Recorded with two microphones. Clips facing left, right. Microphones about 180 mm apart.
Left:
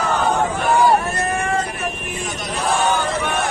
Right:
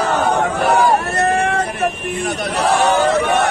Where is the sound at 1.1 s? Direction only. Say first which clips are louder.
Right 5 dB; 65° right (ahead or behind).